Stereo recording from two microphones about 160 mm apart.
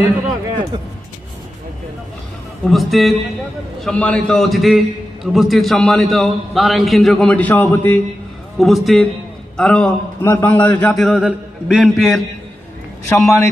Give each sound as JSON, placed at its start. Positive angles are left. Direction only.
{"t": 2.6, "sound": "a man's voice", "side_deg": 0}
{"t": 8.5, "sound": "a man's voice", "side_deg": 0}
{"t": 11.0, "sound": "a man's voice", "side_deg": -5}
{"t": 13.1, "sound": "a man's voice", "side_deg": 15}